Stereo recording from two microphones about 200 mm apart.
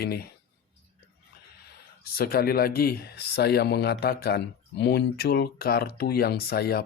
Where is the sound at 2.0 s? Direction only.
50° left (ahead or behind).